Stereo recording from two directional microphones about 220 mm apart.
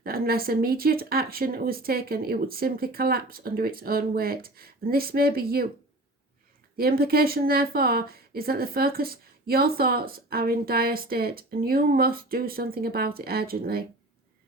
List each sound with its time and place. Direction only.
0.0 s a woman's voice: 45° right (ahead or behind)
6.7 s a woman's voice: 45° right (ahead or behind)